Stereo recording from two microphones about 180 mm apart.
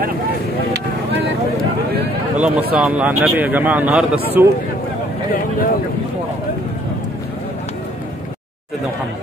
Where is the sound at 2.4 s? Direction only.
5° right (ahead or behind).